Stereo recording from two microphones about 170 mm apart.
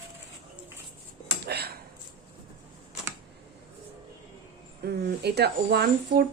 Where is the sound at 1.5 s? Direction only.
70° right (ahead or behind).